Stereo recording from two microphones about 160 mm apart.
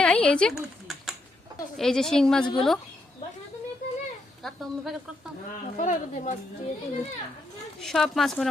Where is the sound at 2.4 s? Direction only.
30° left (ahead or behind).